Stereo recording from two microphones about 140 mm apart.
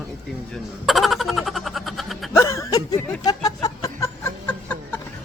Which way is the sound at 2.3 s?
20° left (ahead or behind).